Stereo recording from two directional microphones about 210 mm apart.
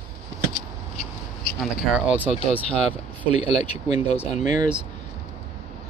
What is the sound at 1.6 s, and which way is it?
Speech, 5° left (ahead or behind).